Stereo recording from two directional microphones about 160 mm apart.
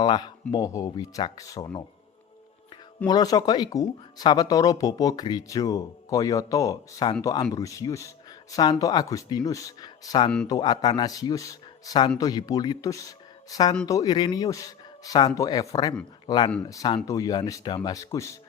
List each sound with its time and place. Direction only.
0.0 s speech: 25° left (ahead or behind)
3.1 s speech: 25° left (ahead or behind)